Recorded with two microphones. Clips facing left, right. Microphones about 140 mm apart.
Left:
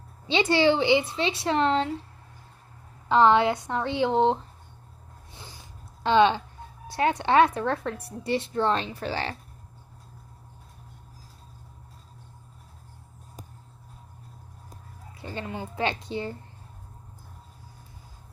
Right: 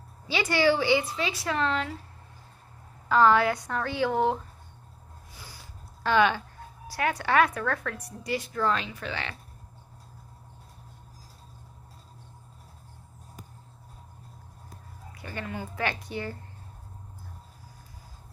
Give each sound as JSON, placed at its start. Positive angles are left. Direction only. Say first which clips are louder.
{"t": 0.3, "sound": "speech", "louder": "left 3 dB", "side_deg": 25}
{"t": 3.1, "sound": "speech", "louder": "left 2 dB", "side_deg": 25}
{"t": 5.3, "sound": "a sound", "louder": "left 2 dB", "side_deg": 25}
{"t": 6.8, "sound": "a woman's voice", "louder": "left 4 dB", "side_deg": 25}
{"t": 15.1, "sound": "speech", "louder": "left 2 dB", "side_deg": 25}